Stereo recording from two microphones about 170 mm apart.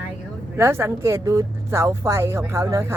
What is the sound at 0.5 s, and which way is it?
Speech, 15° right (ahead or behind).